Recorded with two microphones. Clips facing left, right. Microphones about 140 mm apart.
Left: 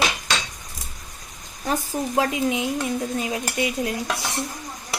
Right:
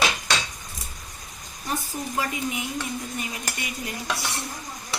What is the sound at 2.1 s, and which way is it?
Speech, 90° left.